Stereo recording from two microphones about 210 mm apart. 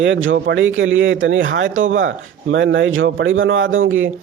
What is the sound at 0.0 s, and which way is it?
A man's voice, 65° right (ahead or behind).